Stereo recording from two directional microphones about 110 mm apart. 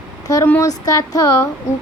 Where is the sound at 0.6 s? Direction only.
35° left (ahead or behind).